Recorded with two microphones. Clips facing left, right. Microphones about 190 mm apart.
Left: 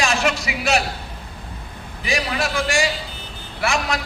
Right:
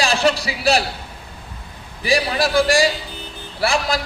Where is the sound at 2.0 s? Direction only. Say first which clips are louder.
Right 5 dB; 35° right (ahead or behind).